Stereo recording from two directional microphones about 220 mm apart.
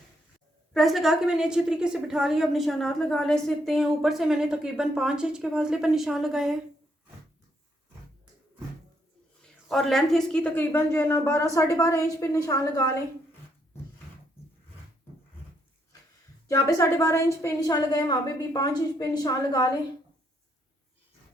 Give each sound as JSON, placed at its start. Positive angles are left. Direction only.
{"t": 0.7, "sound": "a woman's voice", "side_deg": 0}
{"t": 9.6, "sound": "a woman's voice", "side_deg": 0}
{"t": 16.5, "sound": "a woman's voice", "side_deg": 15}